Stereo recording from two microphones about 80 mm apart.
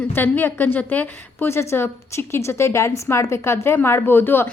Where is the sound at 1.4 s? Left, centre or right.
Left.